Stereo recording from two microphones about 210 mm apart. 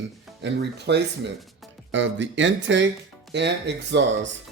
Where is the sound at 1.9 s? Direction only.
60° right (ahead or behind).